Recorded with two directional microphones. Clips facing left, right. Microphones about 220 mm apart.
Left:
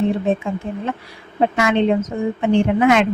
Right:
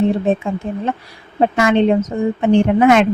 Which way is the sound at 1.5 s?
40° right (ahead or behind).